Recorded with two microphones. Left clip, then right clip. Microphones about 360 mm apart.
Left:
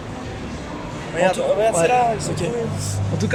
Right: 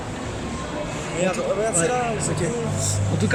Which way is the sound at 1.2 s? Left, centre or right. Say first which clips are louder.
Left 6 dB; centre.